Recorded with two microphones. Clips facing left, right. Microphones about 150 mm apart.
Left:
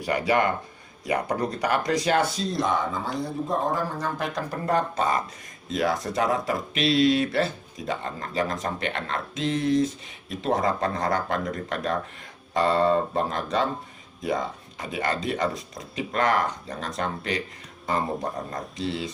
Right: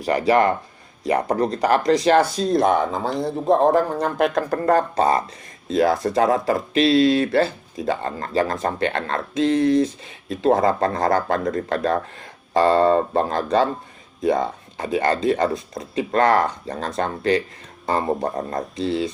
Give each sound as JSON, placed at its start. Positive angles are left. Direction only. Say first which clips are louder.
{"t": 0.0, "sound": "speech", "louder": "right 6 dB", "side_deg": -35}
{"t": 2.5, "sound": "speech", "louder": "right 7 dB", "side_deg": -55}
{"t": 4.4, "sound": "speech", "louder": "right 9 dB", "side_deg": -60}
{"t": 4.7, "sound": "speech", "louder": "right 6 dB", "side_deg": -35}